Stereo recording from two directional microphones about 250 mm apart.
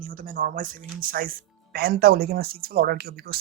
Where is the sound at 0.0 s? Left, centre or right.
Right.